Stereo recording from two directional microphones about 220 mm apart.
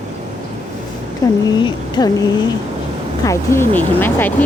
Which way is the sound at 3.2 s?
10° left (ahead or behind).